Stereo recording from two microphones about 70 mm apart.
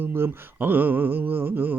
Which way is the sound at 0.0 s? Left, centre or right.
Right.